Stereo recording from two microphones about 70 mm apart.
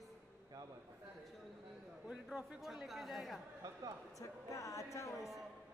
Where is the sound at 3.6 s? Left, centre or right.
Right.